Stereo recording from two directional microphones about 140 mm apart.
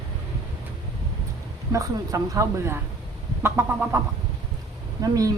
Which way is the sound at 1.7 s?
25° right (ahead or behind).